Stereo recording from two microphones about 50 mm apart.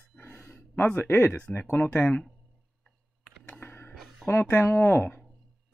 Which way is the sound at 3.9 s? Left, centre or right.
Centre.